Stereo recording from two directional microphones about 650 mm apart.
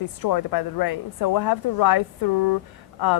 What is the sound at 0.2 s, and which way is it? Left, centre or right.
A woman's voice, left.